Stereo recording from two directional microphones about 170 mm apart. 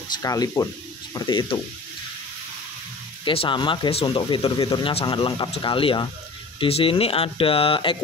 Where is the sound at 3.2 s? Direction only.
30° left (ahead or behind).